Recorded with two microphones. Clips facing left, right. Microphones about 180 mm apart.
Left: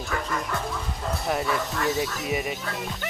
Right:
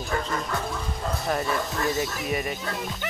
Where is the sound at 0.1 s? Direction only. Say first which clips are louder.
Right 2 dB; 30° right (ahead or behind).